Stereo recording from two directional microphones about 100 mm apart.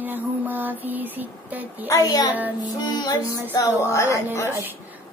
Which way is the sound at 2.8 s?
45° left (ahead or behind).